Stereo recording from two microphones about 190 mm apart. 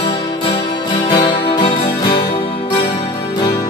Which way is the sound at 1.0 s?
25° left (ahead or behind).